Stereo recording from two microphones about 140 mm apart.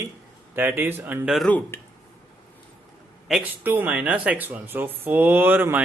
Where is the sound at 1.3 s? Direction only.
5° left (ahead or behind).